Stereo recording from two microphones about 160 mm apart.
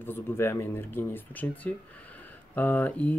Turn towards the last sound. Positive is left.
turn(degrees=10)  # may be behind; listen again after turning